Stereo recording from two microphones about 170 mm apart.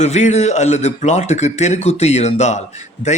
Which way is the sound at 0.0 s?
40° left (ahead or behind).